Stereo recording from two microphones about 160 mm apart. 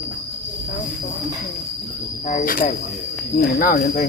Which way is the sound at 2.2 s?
55° left (ahead or behind).